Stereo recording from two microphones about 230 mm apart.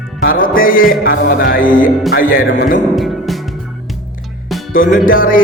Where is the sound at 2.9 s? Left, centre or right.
Centre.